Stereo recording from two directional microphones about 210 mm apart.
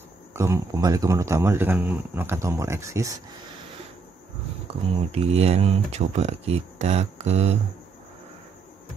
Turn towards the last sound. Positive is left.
turn(degrees=-30)  # may be behind; listen again after turning